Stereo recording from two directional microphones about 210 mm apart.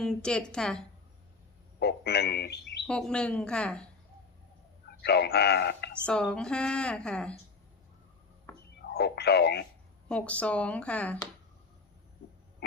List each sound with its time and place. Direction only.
0.0 s a woman's voice: 5° left (ahead or behind)
1.8 s a man's voice: 50° left (ahead or behind)
2.8 s a woman's voice: 5° left (ahead or behind)
5.0 s speech: 50° left (ahead or behind)
6.1 s a woman's voice: 5° left (ahead or behind)
8.9 s speech: 50° left (ahead or behind)
10.1 s a woman's voice: 5° left (ahead or behind)